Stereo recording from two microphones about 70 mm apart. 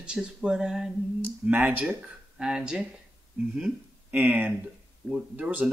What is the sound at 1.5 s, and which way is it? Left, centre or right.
Speech, right.